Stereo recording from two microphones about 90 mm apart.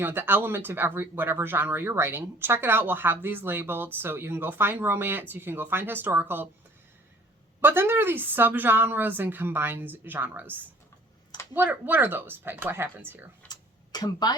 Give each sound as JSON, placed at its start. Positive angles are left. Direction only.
{"t": 0.0, "sound": "speech", "side_deg": -20}
{"t": 7.6, "sound": "speech", "side_deg": -25}
{"t": 13.5, "sound": "tick-tock", "side_deg": 50}